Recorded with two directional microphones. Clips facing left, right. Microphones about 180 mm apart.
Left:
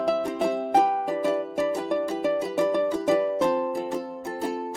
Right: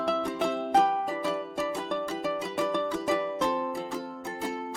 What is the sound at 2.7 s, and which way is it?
Music, 10° left (ahead or behind).